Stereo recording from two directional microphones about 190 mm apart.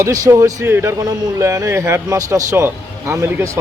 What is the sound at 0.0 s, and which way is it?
Speech, 15° right (ahead or behind).